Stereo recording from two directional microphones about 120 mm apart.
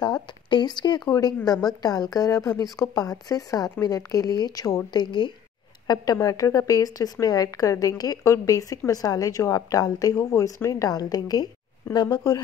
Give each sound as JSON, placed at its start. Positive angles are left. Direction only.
{"t": 0.0, "sound": "a woman's voice", "side_deg": 40}